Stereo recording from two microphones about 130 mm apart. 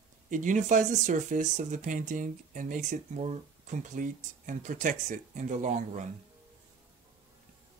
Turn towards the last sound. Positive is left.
turn(degrees=-70)  # may be behind; listen again after turning